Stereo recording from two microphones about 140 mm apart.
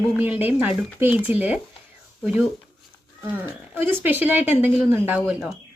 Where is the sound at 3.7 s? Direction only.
15° right (ahead or behind).